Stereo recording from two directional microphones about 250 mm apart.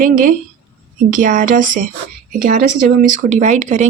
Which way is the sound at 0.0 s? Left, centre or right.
Right.